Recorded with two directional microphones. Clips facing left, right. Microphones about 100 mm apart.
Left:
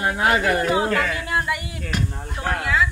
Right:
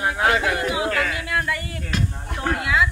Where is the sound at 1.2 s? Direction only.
20° left (ahead or behind).